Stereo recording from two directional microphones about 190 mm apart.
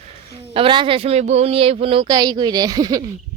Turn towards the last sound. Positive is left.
turn(degrees=-20)  # may be behind; listen again after turning